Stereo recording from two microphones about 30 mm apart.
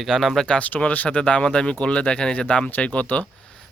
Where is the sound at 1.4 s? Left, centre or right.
Left.